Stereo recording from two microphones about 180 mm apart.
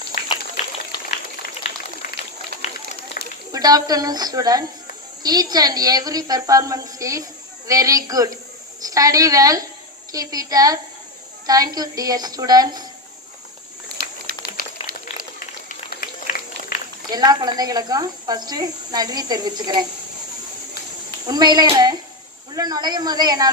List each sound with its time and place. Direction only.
3.2 s a sound: 55° left (ahead or behind)
3.5 s speech: 20° right (ahead or behind)
15.7 s run: 50° left (ahead or behind)
17.1 s speech: 20° right (ahead or behind)
21.2 s speech: 20° right (ahead or behind)